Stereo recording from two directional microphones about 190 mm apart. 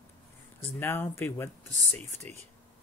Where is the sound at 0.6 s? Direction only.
10° left (ahead or behind).